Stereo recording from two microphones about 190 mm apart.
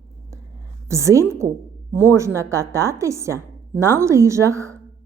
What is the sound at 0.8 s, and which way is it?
A woman's voice, 15° right (ahead or behind).